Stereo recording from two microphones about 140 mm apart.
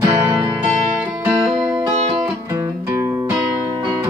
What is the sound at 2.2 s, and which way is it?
Music, 20° right (ahead or behind).